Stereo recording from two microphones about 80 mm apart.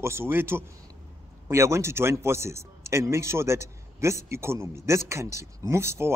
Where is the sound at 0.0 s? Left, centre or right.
Right.